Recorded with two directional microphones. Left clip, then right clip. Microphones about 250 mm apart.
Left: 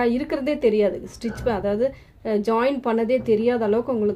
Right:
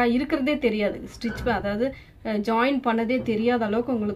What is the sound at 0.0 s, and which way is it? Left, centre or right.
A woman's voice, left.